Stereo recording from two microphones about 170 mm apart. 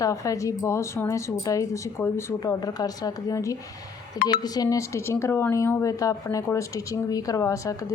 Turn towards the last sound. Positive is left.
turn(degrees=20)  # may be behind; listen again after turning